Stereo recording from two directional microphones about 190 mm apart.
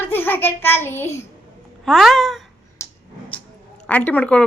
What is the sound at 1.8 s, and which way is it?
Speech, centre (ahead or behind).